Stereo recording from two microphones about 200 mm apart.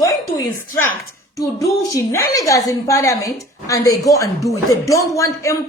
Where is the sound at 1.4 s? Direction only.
15° left (ahead or behind).